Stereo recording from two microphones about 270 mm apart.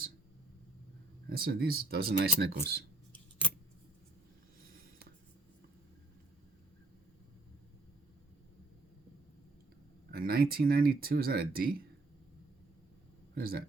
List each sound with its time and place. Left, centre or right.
1.3 s speech: right
4.6 s writing: right
10.1 s speech: right
13.3 s speech: right